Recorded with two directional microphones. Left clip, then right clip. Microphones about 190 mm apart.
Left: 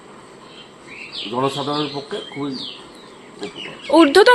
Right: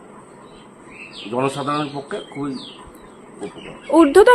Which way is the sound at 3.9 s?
10° right (ahead or behind).